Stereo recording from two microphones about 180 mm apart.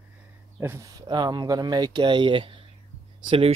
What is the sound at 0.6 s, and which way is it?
Speech, 15° right (ahead or behind).